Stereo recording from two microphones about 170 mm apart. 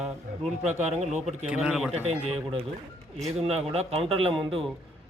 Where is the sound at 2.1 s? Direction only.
35° right (ahead or behind).